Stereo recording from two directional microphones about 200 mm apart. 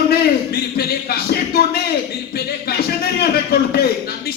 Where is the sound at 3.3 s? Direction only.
50° left (ahead or behind).